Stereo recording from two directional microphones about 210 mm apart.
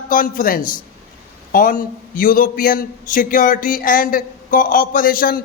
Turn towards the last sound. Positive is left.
turn(degrees=45)  # may be behind; listen again after turning